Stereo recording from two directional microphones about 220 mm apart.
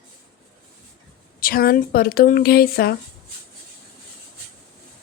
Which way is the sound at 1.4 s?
40° left (ahead or behind).